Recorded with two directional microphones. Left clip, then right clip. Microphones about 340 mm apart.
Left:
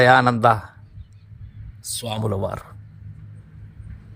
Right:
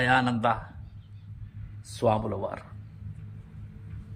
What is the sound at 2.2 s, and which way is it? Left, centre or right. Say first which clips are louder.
Speech: left 7 dB; left.